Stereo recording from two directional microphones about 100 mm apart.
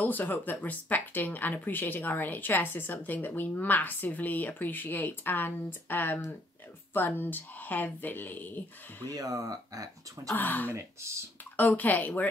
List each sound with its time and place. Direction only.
0.0 s speech: 20° left (ahead or behind)
9.1 s speech: 35° right (ahead or behind)
10.3 s speech: 20° left (ahead or behind)
10.7 s speech: 30° right (ahead or behind)
11.5 s speech: 15° left (ahead or behind)